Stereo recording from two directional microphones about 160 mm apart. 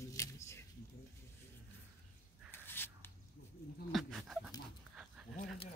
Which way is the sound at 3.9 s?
Centre (ahead or behind).